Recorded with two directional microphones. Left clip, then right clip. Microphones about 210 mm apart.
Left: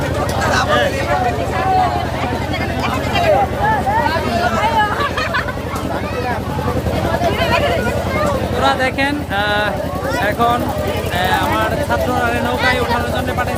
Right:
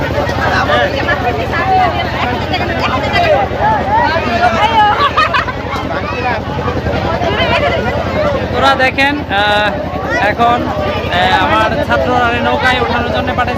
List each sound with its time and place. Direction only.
4.6 s fowl: 30° right (ahead or behind)
7.3 s a sound: 20° right (ahead or behind)
8.6 s speech: 5° right (ahead or behind)